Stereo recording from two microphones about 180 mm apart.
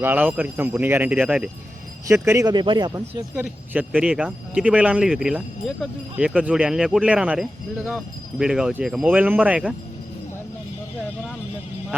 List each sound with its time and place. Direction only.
0.0 s speech: 10° right (ahead or behind)
3.3 s speech: 5° right (ahead or behind)